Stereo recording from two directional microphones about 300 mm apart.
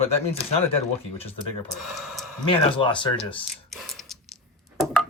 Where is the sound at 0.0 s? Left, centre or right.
Centre.